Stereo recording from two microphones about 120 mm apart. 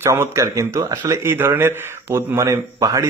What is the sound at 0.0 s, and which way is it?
A man's voice, 20° right (ahead or behind).